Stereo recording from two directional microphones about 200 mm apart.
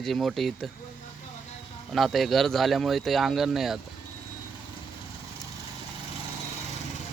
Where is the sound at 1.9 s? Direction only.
Centre (ahead or behind).